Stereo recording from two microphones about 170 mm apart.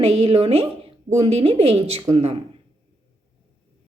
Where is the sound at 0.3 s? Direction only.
35° right (ahead or behind).